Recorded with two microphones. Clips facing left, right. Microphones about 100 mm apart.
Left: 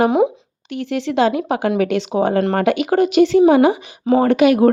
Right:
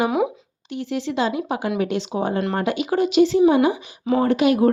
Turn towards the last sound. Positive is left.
turn(degrees=75)  # may be behind; listen again after turning